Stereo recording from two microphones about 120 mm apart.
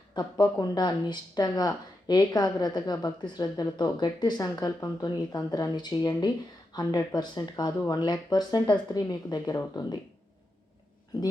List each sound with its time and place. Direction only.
0.2 s speech: 35° left (ahead or behind)